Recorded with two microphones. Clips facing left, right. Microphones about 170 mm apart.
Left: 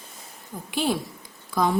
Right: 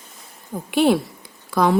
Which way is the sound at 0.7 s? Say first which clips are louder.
Right 9 dB; 65° right (ahead or behind).